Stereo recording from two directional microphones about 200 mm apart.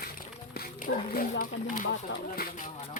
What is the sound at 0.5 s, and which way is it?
Dog, 45° left (ahead or behind).